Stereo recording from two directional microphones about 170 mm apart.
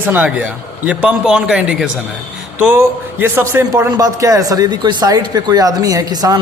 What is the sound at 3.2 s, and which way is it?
Speech, 10° right (ahead or behind).